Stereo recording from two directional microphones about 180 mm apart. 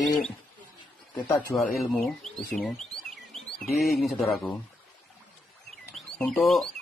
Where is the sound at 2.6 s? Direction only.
Centre (ahead or behind).